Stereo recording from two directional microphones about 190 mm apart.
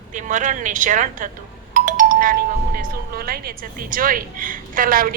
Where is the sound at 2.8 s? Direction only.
55° right (ahead or behind).